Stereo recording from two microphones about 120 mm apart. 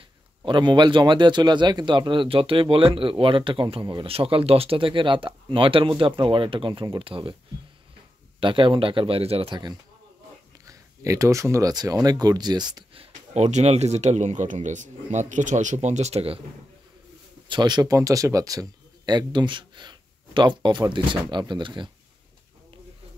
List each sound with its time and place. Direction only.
0.5 s a man's voice: 40° right (ahead or behind)
8.4 s a man's voice: 45° right (ahead or behind)
10.7 s speech: 25° right (ahead or behind)
13.0 s speech: 70° right (ahead or behind)
17.5 s speech: 40° right (ahead or behind)